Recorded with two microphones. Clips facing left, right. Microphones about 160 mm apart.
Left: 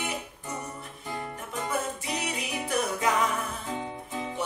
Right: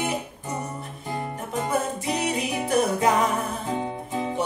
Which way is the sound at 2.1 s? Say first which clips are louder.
Right 10 dB; 35° right (ahead or behind).